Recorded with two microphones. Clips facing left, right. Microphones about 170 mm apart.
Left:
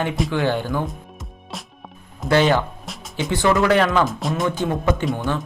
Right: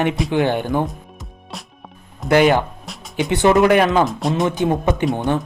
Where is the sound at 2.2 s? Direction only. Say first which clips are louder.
Right 3 dB; 15° right (ahead or behind).